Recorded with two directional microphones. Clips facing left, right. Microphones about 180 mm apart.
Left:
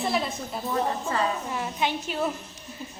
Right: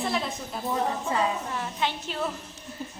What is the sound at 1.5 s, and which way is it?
Speech, 15° left (ahead or behind).